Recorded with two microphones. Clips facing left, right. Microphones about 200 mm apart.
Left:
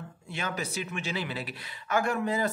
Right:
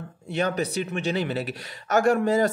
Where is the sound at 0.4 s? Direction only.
35° right (ahead or behind).